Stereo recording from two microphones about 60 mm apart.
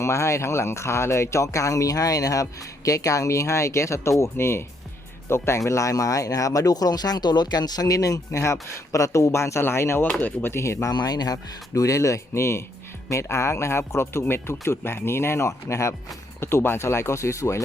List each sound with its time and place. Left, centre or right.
0.0 s speech: left
10.2 s speech: left
10.5 s speech: left
10.8 s speech: left
16.4 s speech: left